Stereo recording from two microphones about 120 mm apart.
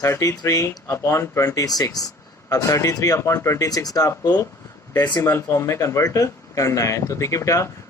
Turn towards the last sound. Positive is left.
turn(degrees=25)  # may be behind; listen again after turning